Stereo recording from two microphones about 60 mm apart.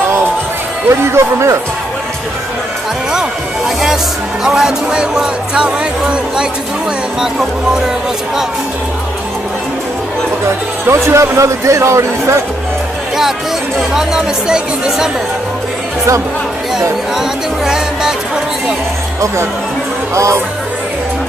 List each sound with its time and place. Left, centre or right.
0.8 s speech: right
3.1 s speech: centre
7.2 s speech: centre
10.9 s a man's voice: right
13.7 s speech: centre
16.7 s speech: centre